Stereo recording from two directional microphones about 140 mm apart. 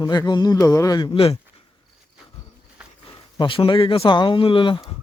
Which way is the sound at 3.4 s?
35° left (ahead or behind).